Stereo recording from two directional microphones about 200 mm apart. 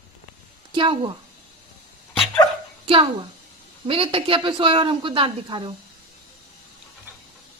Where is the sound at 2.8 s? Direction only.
25° right (ahead or behind).